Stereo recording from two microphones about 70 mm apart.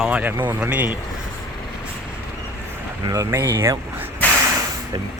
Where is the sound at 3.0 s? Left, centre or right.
Right.